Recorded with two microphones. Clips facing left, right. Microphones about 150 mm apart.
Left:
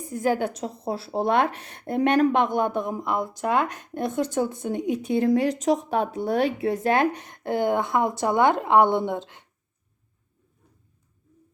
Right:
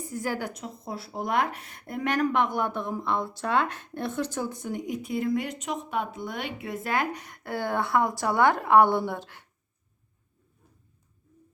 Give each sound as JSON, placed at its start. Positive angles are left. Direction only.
{"t": 0.0, "sound": "a woman's voice", "side_deg": 20}